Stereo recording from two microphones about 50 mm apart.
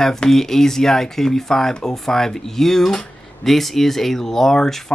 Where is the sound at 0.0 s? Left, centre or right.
Centre.